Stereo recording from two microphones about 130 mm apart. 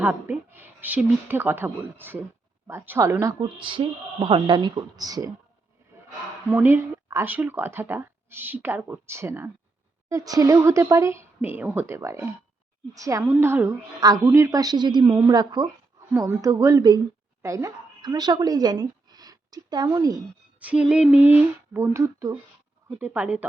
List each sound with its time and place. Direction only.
0.0 s speech: 15° right (ahead or behind)
3.6 s a woman's voice: 40° right (ahead or behind)
6.5 s speech: 15° right (ahead or behind)
10.1 s a woman's voice: 25° right (ahead or behind)
20.6 s speech: 10° right (ahead or behind)
21.3 s speech: 20° right (ahead or behind)
22.9 s speech: 10° right (ahead or behind)